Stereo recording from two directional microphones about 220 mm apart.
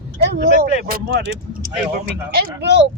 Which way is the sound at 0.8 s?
40° right (ahead or behind).